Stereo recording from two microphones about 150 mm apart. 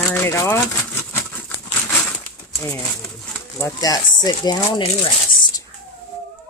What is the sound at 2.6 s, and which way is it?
Speech, 20° left (ahead or behind).